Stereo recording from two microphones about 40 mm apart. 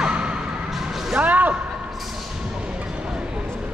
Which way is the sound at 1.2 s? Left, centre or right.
Right.